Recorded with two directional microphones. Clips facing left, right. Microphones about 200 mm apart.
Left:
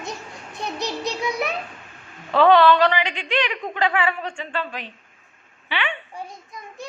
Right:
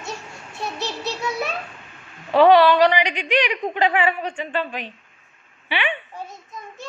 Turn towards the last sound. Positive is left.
turn(degrees=-15)  # may be behind; listen again after turning